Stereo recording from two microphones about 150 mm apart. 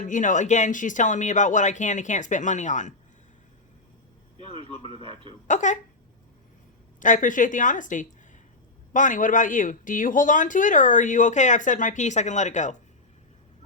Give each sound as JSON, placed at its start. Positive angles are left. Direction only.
{"t": 0.0, "sound": "speech", "side_deg": 60}
{"t": 5.5, "sound": "speech", "side_deg": 55}
{"t": 7.0, "sound": "speech", "side_deg": 60}